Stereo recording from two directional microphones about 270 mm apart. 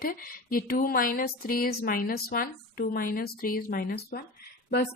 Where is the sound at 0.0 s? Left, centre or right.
Left.